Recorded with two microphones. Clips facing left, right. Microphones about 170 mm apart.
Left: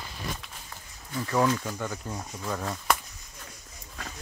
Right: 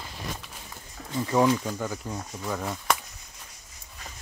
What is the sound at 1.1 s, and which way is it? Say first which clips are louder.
Speech: right 3 dB; 15° right (ahead or behind).